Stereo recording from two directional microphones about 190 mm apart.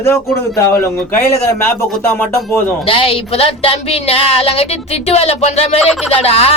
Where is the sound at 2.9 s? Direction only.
30° left (ahead or behind).